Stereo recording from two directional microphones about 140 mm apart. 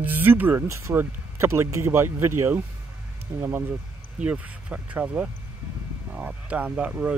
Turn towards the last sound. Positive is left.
turn(degrees=-10)  # may be behind; listen again after turning